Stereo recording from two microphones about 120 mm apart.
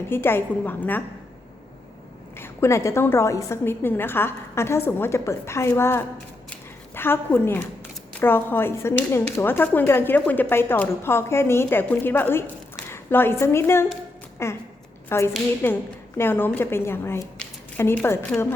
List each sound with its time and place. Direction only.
0.1 s a woman's voice: 20° left (ahead or behind)
2.3 s a woman's voice: 20° left (ahead or behind)